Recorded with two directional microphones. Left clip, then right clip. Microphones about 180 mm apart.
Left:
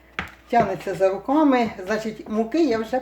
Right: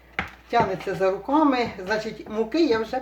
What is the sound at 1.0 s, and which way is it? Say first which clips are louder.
Speech: left 2 dB; 40° left (ahead or behind).